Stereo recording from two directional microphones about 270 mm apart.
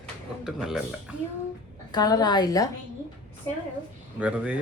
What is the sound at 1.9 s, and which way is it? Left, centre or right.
Speech, centre.